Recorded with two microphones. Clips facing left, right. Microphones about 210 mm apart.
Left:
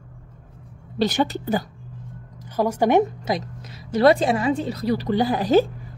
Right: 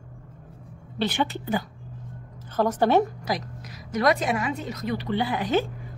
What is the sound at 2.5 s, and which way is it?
A woman's voice, 10° left (ahead or behind).